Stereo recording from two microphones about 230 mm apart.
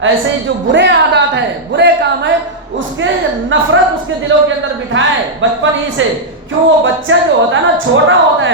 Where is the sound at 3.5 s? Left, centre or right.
Right.